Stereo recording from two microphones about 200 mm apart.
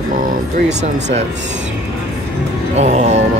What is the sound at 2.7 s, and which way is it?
Speech, 35° right (ahead or behind).